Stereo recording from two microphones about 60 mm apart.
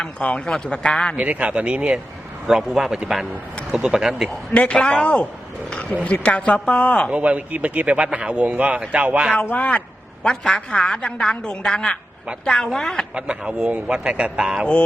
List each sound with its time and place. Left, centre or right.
0.0 s a woman's voice: centre
1.1 s speech: right; by 4.3 s centre
4.5 s a woman's voice: centre
7.1 s speech: right
9.3 s a woman's voice: left
13.1 s speech: centre